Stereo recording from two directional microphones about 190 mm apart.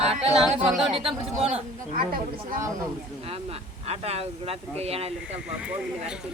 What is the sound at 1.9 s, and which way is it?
Speech, 45° right (ahead or behind).